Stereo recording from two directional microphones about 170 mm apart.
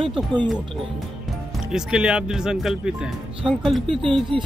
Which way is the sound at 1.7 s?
5° right (ahead or behind).